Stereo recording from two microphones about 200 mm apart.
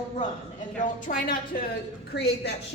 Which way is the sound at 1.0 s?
40° left (ahead or behind).